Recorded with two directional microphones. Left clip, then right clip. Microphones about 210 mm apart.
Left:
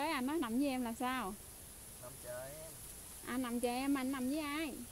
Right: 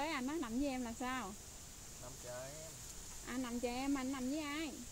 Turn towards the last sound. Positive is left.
turn(degrees=45)  # may be behind; listen again after turning